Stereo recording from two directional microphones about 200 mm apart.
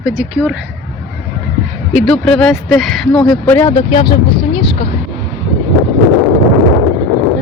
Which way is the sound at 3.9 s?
25° left (ahead or behind).